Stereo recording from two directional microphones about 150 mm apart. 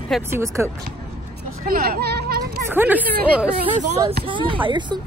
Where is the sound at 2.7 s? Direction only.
10° right (ahead or behind).